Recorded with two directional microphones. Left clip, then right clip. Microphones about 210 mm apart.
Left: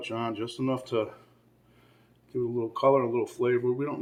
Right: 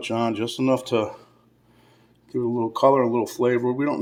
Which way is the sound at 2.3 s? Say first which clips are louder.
Right 6 dB; 50° right (ahead or behind).